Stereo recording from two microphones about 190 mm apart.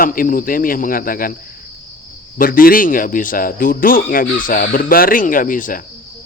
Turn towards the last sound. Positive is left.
turn(degrees=45)  # may be behind; listen again after turning